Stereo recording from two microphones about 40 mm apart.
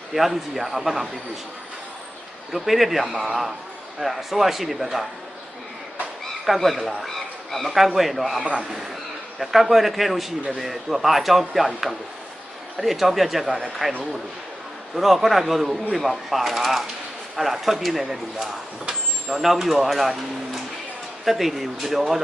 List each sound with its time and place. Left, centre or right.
0.1 s speech: centre
2.5 s speech: centre
6.4 s speech: centre
6.7 s a man's voice: centre
7.0 s a sound: centre
7.9 s speech: centre
8.4 s a man's voice: right
9.4 s speech: centre
14.9 s speech: centre